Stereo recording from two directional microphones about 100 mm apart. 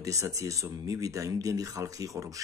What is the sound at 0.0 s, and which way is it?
Speech, 35° right (ahead or behind).